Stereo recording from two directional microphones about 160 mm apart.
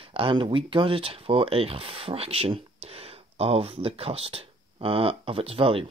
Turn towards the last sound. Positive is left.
turn(degrees=-35)  # may be behind; listen again after turning